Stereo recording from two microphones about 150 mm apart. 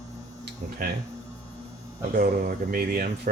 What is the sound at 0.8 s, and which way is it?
Speech, 65° right (ahead or behind).